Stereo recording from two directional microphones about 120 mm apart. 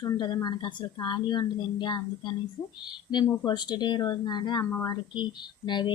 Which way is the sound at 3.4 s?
35° left (ahead or behind).